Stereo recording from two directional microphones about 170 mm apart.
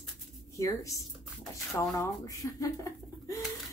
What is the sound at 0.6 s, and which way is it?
A woman's voice, 20° left (ahead or behind).